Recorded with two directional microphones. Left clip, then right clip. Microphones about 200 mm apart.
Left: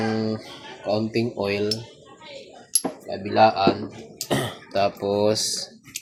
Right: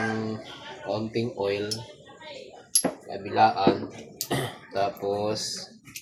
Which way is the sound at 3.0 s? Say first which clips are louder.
Left 4 dB; 45° left (ahead or behind).